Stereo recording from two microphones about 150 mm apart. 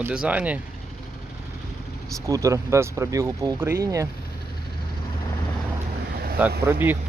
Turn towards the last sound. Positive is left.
turn(degrees=-15)  # may be behind; listen again after turning